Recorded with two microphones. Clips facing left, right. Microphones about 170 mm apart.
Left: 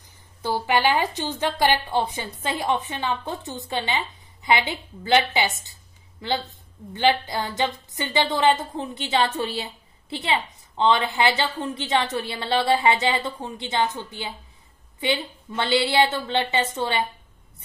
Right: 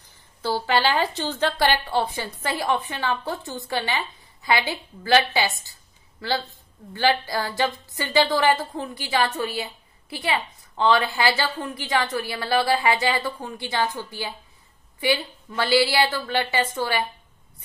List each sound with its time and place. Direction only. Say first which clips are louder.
0.4 s a woman's voice: even; 15° left (ahead or behind)